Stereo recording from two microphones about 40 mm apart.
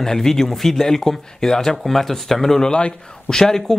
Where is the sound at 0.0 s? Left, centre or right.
Centre.